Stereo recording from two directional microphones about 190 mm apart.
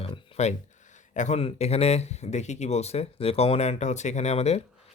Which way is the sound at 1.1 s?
40° left (ahead or behind).